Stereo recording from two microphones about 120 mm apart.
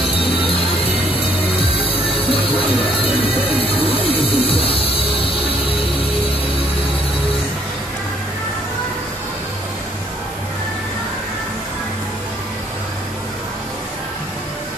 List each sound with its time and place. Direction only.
0.5 s music: 50° left (ahead or behind)